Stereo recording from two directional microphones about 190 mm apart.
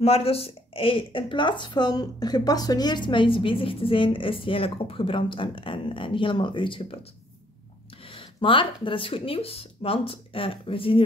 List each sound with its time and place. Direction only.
0.0 s speech: 30° left (ahead or behind)
8.1 s speech: 25° left (ahead or behind)